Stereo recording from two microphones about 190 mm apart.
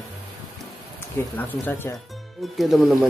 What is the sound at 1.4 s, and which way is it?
Speech, 10° left (ahead or behind).